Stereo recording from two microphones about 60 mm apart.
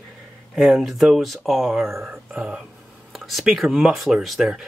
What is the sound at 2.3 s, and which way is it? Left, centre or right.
Speech, centre.